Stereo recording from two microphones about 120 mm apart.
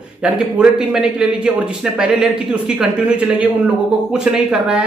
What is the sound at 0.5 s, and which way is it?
A man's voice, 10° right (ahead or behind).